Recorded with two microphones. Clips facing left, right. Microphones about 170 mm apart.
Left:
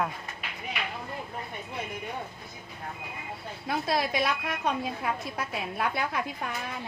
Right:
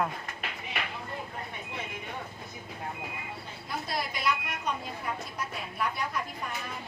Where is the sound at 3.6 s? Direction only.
75° left (ahead or behind).